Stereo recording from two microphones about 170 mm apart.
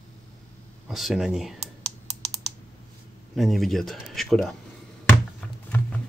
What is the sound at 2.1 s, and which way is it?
Typing, 35° right (ahead or behind).